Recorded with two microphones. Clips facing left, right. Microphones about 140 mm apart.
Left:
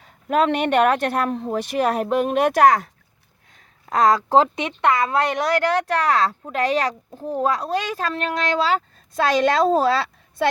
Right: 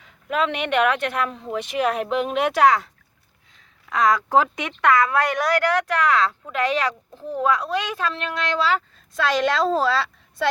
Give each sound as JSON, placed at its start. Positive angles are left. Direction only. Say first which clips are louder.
{"t": 0.0, "sound": "a woman's voice", "louder": "left 4 dB", "side_deg": 40}